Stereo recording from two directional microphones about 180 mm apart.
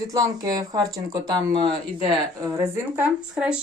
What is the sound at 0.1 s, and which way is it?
Speech, 20° right (ahead or behind).